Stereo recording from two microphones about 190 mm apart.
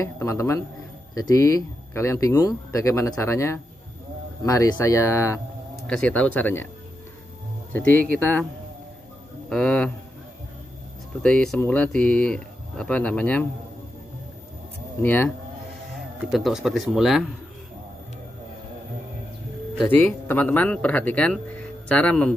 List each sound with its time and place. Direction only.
0.0 s speech: 15° left (ahead or behind)
5.9 s speech: 5° left (ahead or behind)
7.8 s speech: 50° right (ahead or behind)
8.2 s speech: 10° left (ahead or behind)
9.5 s speech: 5° left (ahead or behind)
11.2 s speech: 5° left (ahead or behind)
15.0 s speech: 10° left (ahead or behind)
16.3 s speech: centre (ahead or behind)
19.8 s speech: 10° left (ahead or behind)